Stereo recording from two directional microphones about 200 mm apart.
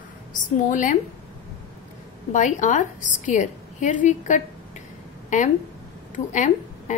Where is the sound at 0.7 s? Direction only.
40° left (ahead or behind).